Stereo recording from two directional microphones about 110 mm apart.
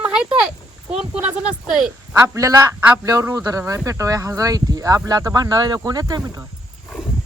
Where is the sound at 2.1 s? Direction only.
30° right (ahead or behind).